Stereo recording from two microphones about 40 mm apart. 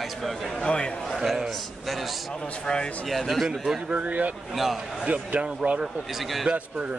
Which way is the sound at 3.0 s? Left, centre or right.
Centre.